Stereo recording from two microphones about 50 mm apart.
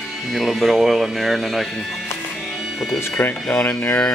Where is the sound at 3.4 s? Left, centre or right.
Left.